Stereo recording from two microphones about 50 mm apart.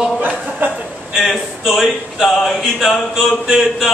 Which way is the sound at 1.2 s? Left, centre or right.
Centre.